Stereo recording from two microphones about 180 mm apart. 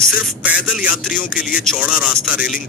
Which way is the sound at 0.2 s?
5° right (ahead or behind).